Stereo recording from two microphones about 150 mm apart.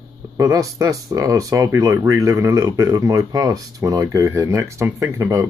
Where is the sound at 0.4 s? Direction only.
20° right (ahead or behind).